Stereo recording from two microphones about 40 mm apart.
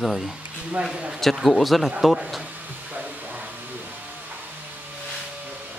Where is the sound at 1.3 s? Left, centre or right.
Centre.